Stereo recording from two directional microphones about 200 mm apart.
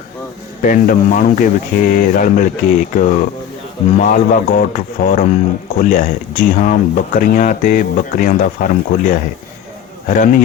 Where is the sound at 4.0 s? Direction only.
45° left (ahead or behind).